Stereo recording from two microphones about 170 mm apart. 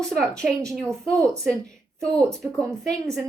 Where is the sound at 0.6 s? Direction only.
20° right (ahead or behind).